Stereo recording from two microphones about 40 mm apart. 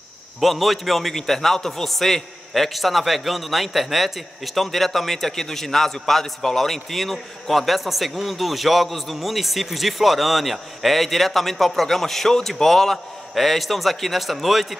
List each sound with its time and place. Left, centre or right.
0.4 s a man's voice: centre